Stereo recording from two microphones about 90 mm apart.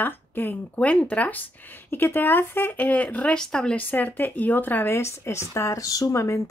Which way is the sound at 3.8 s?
20° left (ahead or behind).